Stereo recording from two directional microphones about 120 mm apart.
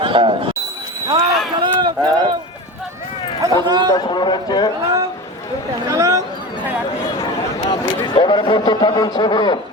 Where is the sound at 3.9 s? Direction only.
35° left (ahead or behind).